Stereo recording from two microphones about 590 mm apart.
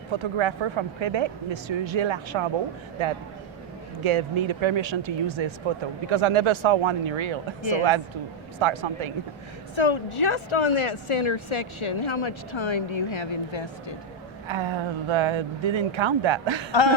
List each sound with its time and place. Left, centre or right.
0.1 s speech: right
4.0 s speech: right
7.6 s speech: left
8.5 s speech: right
9.7 s speech: left
14.4 s speech: right